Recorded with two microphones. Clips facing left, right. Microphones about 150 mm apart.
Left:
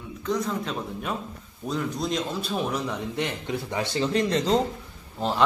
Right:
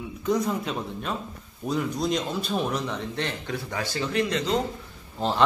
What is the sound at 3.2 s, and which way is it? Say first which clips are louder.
Speech: left 2 dB; 15° left (ahead or behind).